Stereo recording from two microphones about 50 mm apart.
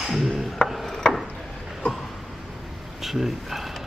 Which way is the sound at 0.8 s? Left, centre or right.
Centre.